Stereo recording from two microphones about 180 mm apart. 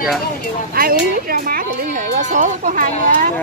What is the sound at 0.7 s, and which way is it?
Speech, 55° right (ahead or behind).